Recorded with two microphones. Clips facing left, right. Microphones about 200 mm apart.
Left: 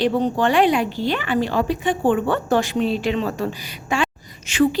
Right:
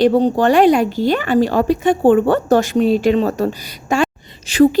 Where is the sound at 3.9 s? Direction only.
40° right (ahead or behind).